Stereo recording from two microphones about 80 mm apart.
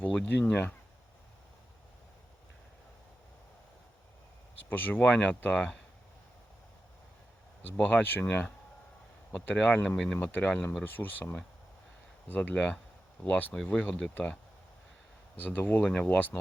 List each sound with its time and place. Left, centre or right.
0.0 s speech: left
4.7 s speech: left
7.6 s speech: left
9.8 s speech: centre
10.3 s speech: centre
15.4 s speech: left